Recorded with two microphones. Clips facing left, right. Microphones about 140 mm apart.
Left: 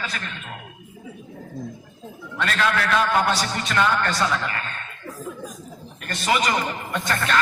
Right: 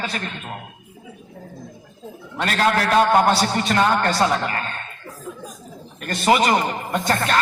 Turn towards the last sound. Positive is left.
turn(degrees=-35)  # may be behind; listen again after turning